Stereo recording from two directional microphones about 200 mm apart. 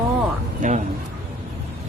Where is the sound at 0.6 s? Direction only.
40° right (ahead or behind).